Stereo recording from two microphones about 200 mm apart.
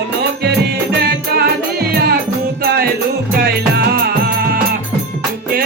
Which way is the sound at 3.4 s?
50° right (ahead or behind).